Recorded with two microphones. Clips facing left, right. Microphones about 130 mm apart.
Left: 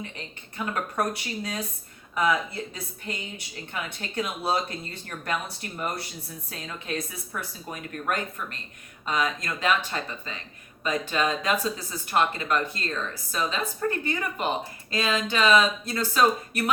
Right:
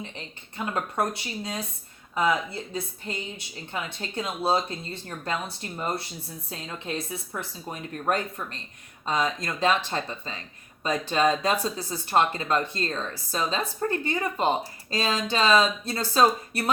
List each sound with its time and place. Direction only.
0.5 s a woman's voice: 25° right (ahead or behind)